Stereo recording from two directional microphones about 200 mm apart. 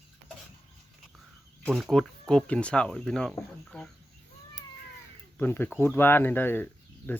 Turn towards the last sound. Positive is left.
turn(degrees=10)  # may be behind; listen again after turning